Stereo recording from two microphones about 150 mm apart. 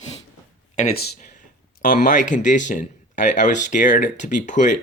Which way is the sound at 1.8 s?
60° left (ahead or behind).